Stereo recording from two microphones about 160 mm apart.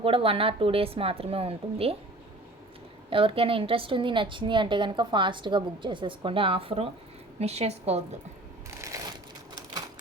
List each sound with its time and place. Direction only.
0.0 s a woman's voice: 35° right (ahead or behind)
3.1 s a woman's voice: 35° right (ahead or behind)
8.9 s crumpling: 20° right (ahead or behind)